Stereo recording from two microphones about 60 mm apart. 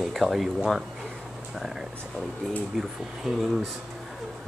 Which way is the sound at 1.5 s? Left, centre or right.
Centre.